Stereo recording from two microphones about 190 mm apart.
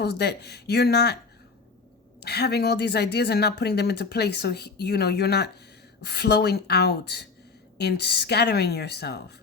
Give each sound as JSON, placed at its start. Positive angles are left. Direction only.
{"t": 0.0, "sound": "a woman's voice", "side_deg": 60}
{"t": 2.2, "sound": "a woman's voice", "side_deg": 60}